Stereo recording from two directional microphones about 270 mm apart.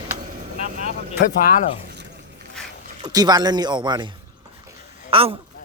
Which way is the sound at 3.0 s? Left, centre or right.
Centre.